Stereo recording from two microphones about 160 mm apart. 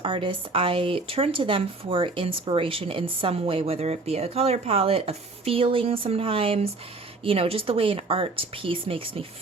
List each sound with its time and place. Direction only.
0.0 s speech: 30° right (ahead or behind)